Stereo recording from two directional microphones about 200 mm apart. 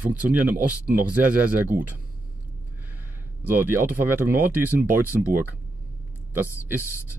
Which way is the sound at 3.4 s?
10° right (ahead or behind).